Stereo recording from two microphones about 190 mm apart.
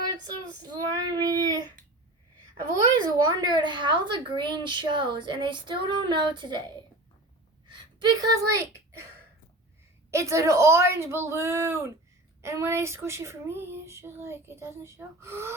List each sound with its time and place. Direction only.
0.6 s a woman's voice: 20° right (ahead or behind)
3.0 s a woman's voice: 20° right (ahead or behind)
7.7 s a sound: 20° right (ahead or behind)
10.1 s speech: 15° right (ahead or behind)